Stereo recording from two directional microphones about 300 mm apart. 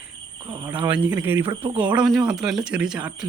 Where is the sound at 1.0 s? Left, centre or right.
Centre.